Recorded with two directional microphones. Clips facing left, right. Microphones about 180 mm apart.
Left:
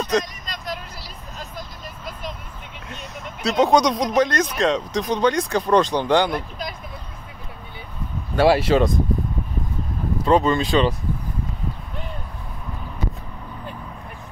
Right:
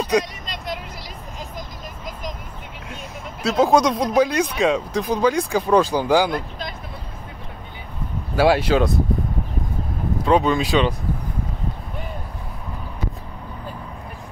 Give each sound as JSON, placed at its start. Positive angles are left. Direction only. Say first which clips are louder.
{"t": 0.2, "sound": "vehicle", "louder": "right 2 dB", "side_deg": -25}
{"t": 3.4, "sound": "speech", "louder": "right 1 dB", "side_deg": -5}
{"t": 8.4, "sound": "speech", "louder": "left 1 dB", "side_deg": 0}
{"t": 10.2, "sound": "speech", "louder": "even", "side_deg": 0}